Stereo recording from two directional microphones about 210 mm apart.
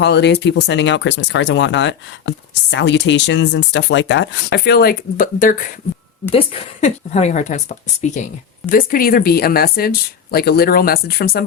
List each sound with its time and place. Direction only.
0.0 s a woman's voice: 55° left (ahead or behind)